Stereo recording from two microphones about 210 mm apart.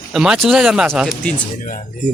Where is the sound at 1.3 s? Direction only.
35° left (ahead or behind).